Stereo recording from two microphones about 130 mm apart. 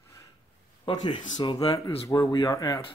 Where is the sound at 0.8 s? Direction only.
35° left (ahead or behind).